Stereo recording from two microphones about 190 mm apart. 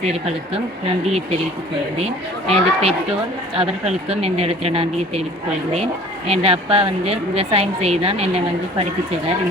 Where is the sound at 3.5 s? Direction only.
30° right (ahead or behind).